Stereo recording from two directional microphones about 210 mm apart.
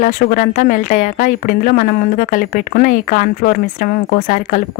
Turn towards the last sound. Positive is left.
turn(degrees=40)  # may be behind; listen again after turning